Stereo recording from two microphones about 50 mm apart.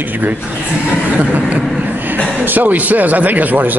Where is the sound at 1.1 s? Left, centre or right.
Right.